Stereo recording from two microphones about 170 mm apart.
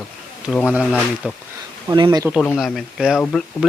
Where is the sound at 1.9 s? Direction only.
25° right (ahead or behind).